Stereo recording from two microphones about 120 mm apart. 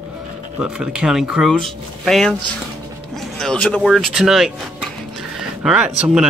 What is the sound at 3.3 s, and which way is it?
Speech, 5° left (ahead or behind).